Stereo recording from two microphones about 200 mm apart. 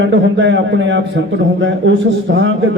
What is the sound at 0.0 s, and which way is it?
A man's voice, 65° right (ahead or behind).